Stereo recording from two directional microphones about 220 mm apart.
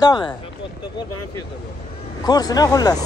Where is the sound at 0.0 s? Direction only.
20° left (ahead or behind).